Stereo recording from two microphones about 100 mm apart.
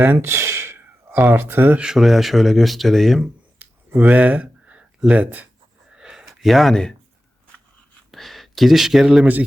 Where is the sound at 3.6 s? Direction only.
20° right (ahead or behind).